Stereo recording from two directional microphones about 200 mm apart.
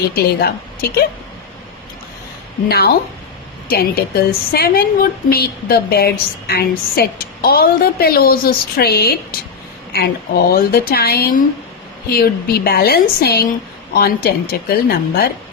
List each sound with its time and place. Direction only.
0.1 s a woman's voice: 50° left (ahead or behind)
2.6 s a woman's voice: 50° left (ahead or behind)